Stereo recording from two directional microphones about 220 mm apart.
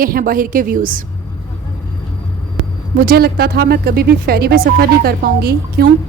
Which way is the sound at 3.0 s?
45° right (ahead or behind).